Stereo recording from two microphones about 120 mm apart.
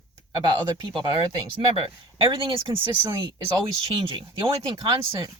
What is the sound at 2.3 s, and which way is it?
Speech, 45° right (ahead or behind).